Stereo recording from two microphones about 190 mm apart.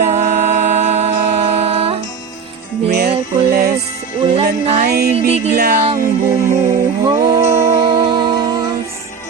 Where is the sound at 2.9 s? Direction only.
55° right (ahead or behind).